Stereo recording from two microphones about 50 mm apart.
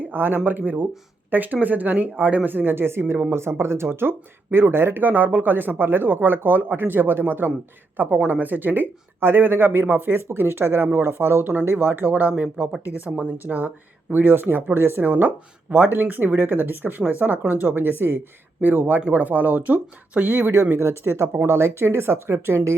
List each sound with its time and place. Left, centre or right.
0.0 s speech: right